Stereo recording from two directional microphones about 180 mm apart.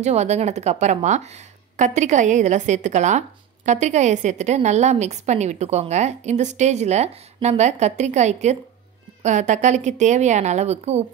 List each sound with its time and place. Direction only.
0.0 s a woman's voice: 40° right (ahead or behind)